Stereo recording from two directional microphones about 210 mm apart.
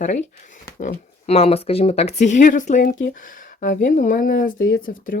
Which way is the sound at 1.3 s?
30° left (ahead or behind).